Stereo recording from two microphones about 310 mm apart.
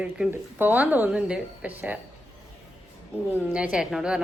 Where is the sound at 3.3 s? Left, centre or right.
Centre.